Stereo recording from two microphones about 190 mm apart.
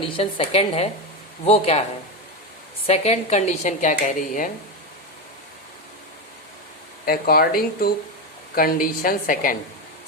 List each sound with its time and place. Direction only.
0.0 s speech: 30° left (ahead or behind)
2.8 s speech: 35° left (ahead or behind)
7.0 s a woman's voice: 50° left (ahead or behind)